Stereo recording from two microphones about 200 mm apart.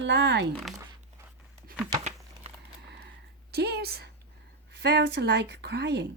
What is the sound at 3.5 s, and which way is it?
A woman's voice, 55° right (ahead or behind).